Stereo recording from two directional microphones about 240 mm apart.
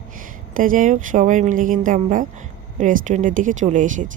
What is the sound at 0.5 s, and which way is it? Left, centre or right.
Speech, right.